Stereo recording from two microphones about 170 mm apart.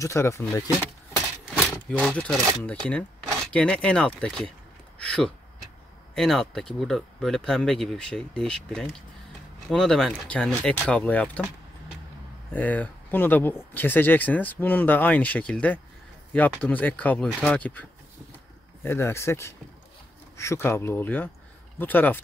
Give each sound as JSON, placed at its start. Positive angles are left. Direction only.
{"t": 0.0, "sound": "speech", "side_deg": 15}
{"t": 1.7, "sound": "speech", "side_deg": 5}
{"t": 12.5, "sound": "speech", "side_deg": 10}